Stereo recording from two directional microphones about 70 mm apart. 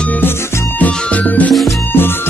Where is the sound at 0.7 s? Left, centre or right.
Left.